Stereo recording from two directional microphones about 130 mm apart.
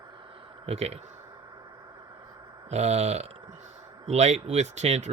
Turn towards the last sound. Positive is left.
turn(degrees=-60)  # may be behind; listen again after turning